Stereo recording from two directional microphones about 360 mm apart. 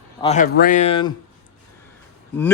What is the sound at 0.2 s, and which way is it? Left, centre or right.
Speech, centre.